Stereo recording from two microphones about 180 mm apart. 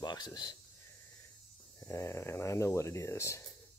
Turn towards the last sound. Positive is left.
turn(degrees=15)  # may be behind; listen again after turning